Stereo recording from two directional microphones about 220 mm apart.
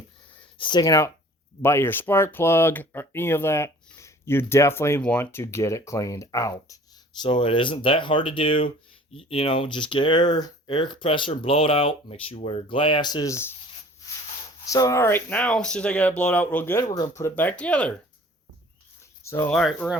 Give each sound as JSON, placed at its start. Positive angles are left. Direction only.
{"t": 0.6, "sound": "speech", "side_deg": 20}
{"t": 14.7, "sound": "speech", "side_deg": 15}
{"t": 19.2, "sound": "speech", "side_deg": 10}